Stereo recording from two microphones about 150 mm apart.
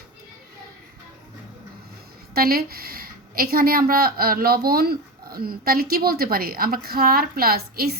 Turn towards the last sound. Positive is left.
turn(degrees=-90)